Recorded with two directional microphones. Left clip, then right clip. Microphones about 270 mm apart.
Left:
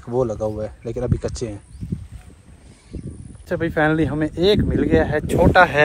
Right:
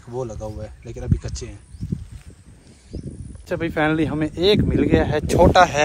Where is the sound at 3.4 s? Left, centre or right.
Centre.